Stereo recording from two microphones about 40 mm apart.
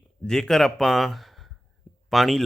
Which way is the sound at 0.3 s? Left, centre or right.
Centre.